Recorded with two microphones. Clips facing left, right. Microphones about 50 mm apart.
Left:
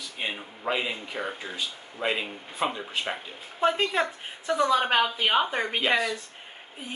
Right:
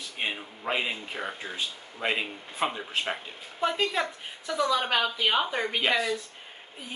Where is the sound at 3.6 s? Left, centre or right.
Centre.